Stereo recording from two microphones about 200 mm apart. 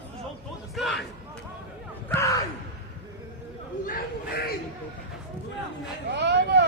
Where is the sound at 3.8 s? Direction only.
45° left (ahead or behind).